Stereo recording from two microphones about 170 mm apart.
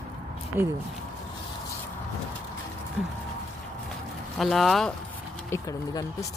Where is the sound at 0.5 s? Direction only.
10° right (ahead or behind).